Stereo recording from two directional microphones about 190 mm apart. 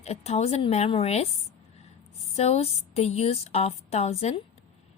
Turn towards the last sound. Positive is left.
turn(degrees=35)  # may be behind; listen again after turning